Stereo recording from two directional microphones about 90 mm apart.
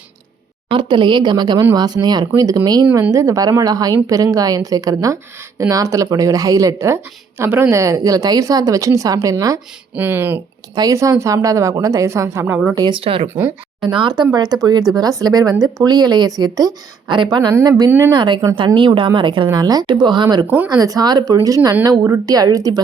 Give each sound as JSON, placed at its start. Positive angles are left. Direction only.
{"t": 0.7, "sound": "a woman's voice", "side_deg": -60}
{"t": 9.9, "sound": "speech", "side_deg": -20}
{"t": 10.8, "sound": "speech", "side_deg": -40}
{"t": 12.9, "sound": "speech", "side_deg": -85}
{"t": 13.8, "sound": "a woman's voice", "side_deg": -55}
{"t": 14.3, "sound": "a woman's voice", "side_deg": -45}
{"t": 17.1, "sound": "a woman's voice", "side_deg": -55}
{"t": 18.1, "sound": "speech", "side_deg": -55}
{"t": 19.5, "sound": "a woman's voice", "side_deg": -45}
{"t": 20.7, "sound": "a woman's voice", "side_deg": -40}
{"t": 21.8, "sound": "speech", "side_deg": -30}
{"t": 22.3, "sound": "a woman's voice", "side_deg": -45}